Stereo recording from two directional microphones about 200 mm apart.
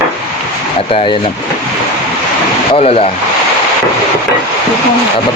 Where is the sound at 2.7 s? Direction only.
30° left (ahead or behind).